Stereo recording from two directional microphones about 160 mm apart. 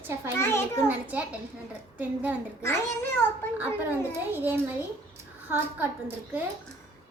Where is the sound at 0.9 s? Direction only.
10° right (ahead or behind).